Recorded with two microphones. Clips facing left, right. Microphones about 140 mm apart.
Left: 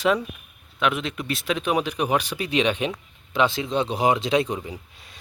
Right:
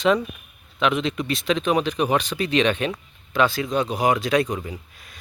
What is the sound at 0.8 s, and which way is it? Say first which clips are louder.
Speech: right 3 dB; centre (ahead or behind).